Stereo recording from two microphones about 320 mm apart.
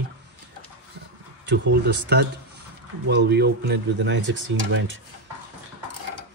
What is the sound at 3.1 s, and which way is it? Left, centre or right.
Speech, right.